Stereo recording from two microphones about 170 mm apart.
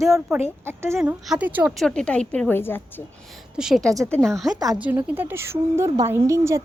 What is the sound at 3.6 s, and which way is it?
A woman's voice, centre (ahead or behind).